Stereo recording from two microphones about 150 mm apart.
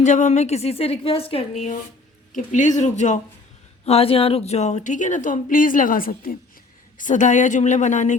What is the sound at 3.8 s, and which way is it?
Speech, 40° left (ahead or behind).